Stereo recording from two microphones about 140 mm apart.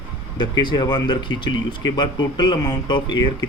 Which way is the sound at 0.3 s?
35° left (ahead or behind).